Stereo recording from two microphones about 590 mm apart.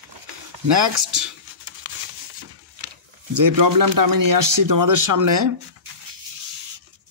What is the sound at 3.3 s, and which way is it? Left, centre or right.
Speech, right.